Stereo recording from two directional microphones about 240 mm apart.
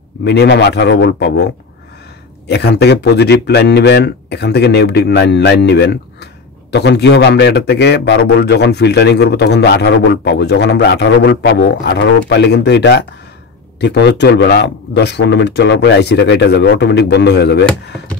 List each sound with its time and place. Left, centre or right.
0.2 s a man's voice: left